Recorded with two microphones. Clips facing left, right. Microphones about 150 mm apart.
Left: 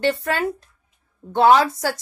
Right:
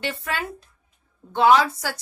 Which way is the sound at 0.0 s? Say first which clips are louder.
Left 8 dB; 45° left (ahead or behind).